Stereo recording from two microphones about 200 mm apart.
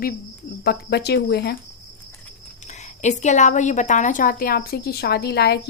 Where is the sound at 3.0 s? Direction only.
35° left (ahead or behind).